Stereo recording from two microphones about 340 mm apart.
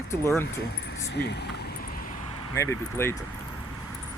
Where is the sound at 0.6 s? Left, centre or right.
Left.